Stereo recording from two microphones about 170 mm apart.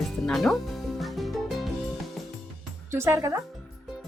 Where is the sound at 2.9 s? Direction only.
15° right (ahead or behind).